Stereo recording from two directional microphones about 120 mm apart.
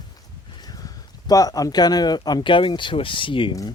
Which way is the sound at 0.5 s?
35° left (ahead or behind).